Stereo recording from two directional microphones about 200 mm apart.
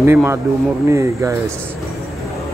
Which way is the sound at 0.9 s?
15° right (ahead or behind).